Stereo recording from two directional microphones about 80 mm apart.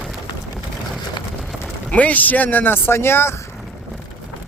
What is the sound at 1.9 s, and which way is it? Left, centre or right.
Speech, centre.